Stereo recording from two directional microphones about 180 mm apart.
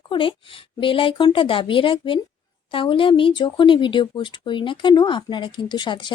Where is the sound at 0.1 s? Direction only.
30° left (ahead or behind).